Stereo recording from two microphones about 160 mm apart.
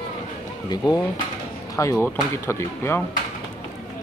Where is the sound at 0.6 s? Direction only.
25° left (ahead or behind).